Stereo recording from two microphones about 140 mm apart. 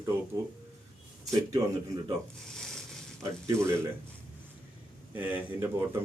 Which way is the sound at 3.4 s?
20° right (ahead or behind).